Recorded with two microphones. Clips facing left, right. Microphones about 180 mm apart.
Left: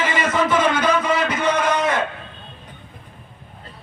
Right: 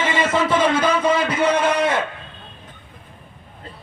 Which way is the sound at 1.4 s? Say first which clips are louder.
Right 2 dB; 30° right (ahead or behind).